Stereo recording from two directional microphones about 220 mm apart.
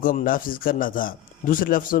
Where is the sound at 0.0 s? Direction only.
40° left (ahead or behind).